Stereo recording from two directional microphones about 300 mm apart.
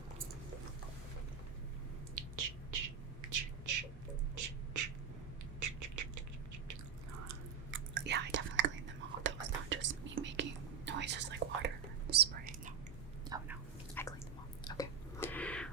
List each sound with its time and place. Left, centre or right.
2.1 s a sound: right
4.4 s beatboxing: right
5.5 s duck: right
7.7 s chewing: right
9.2 s whispering: right
14.0 s a sound: centre
14.6 s whispering: centre